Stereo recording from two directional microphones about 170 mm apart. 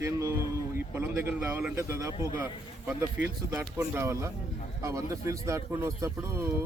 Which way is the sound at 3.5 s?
15° right (ahead or behind).